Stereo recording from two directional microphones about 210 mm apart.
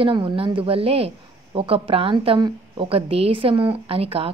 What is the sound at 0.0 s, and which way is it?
A woman's voice, 25° right (ahead or behind).